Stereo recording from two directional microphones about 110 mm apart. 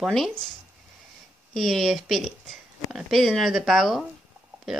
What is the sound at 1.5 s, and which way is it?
Speech, centre (ahead or behind).